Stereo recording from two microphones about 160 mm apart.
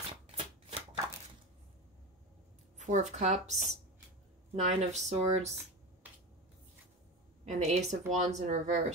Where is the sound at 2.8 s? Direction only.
45° right (ahead or behind).